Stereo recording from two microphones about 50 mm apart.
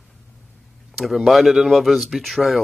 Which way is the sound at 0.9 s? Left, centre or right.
Centre.